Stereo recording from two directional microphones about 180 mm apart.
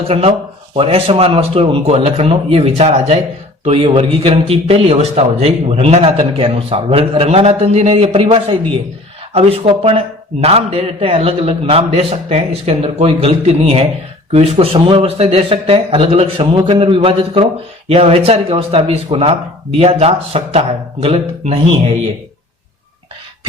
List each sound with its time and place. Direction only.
0.1 s a man's voice: 35° right (ahead or behind)